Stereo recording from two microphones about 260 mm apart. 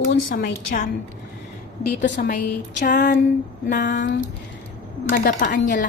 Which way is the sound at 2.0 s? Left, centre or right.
Left.